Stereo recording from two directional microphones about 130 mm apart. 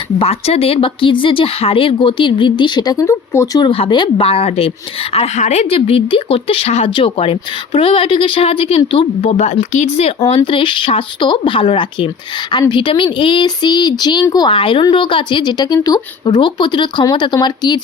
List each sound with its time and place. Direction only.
0.2 s speech: 50° left (ahead or behind); by 3.6 s 25° left (ahead or behind)
3.6 s a woman's voice: 40° left (ahead or behind)
9.4 s speech: 65° left (ahead or behind)
10.2 s speech: 40° left (ahead or behind)